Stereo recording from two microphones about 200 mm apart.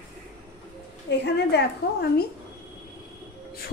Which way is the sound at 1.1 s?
60° left (ahead or behind).